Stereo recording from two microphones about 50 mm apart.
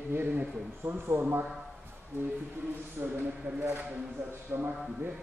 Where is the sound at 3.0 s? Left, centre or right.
Right.